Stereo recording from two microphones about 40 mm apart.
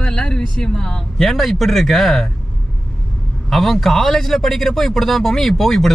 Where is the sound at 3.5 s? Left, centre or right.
Centre.